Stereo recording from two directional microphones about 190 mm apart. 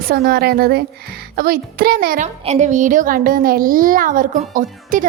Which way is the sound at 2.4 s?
40° right (ahead or behind).